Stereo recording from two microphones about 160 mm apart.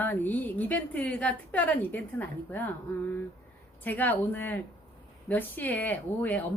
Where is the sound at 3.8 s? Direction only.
10° left (ahead or behind).